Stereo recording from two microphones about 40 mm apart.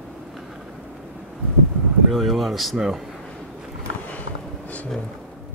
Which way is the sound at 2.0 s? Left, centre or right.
Centre.